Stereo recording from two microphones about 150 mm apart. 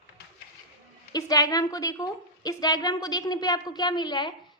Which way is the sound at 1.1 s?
25° left (ahead or behind).